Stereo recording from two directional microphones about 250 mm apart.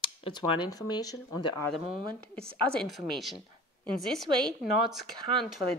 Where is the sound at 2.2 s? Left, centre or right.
Centre.